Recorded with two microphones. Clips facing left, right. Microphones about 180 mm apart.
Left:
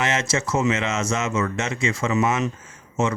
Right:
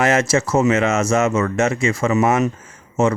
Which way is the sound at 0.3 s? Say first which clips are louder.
Right 6 dB; 50° right (ahead or behind).